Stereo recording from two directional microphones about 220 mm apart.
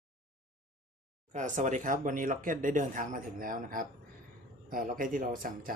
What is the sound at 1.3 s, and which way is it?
Speech, 35° right (ahead or behind).